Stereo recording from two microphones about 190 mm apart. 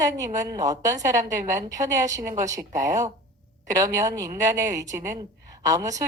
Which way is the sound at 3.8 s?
20° right (ahead or behind).